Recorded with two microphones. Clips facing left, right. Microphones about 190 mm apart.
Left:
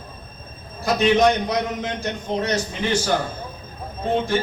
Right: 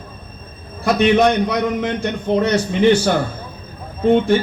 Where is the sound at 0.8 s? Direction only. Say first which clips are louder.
Right 3 dB; 60° right (ahead or behind).